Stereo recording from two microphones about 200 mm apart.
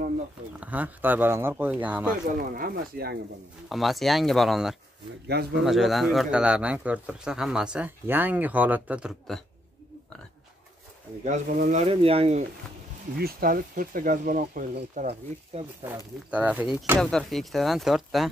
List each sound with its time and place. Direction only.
0.6 s speech: 10° right (ahead or behind)
2.2 s speech: 45° right (ahead or behind)
3.6 s speech: centre (ahead or behind)
11.2 s speech: 40° right (ahead or behind)
11.8 s speech: 30° right (ahead or behind)
13.2 s speech: 45° right (ahead or behind)
16.3 s speech: 5° right (ahead or behind)
17.0 s speech: centre (ahead or behind)